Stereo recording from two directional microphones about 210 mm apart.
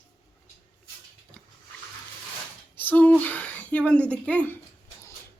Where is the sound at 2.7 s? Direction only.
10° left (ahead or behind).